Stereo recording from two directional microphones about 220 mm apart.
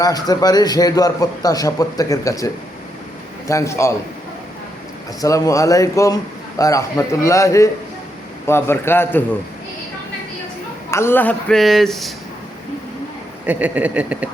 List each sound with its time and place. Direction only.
0.0 s a man's voice: 15° left (ahead or behind)
5.2 s a man's voice: 15° left (ahead or behind)
10.9 s speech: 10° left (ahead or behind)
13.4 s a sound: 5° right (ahead or behind)